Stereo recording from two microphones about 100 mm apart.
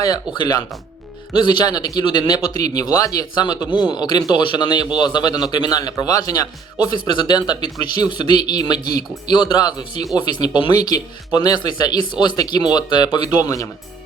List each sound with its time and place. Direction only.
0.0 s a man's voice: 40° left (ahead or behind)
7.1 s speech: 50° left (ahead or behind)